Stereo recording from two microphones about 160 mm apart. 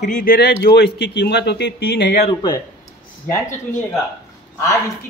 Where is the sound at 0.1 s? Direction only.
65° left (ahead or behind); by 2.1 s 90° left.